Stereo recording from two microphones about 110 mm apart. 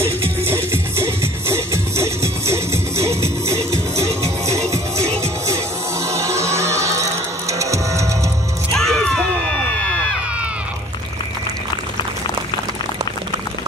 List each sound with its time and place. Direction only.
0.5 s music: 25° right (ahead or behind)
6.0 s music: 25° right (ahead or behind)
8.7 s a sound: 5° left (ahead or behind)